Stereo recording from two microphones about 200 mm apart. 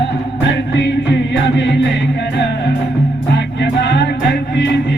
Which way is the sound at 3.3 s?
60° left (ahead or behind).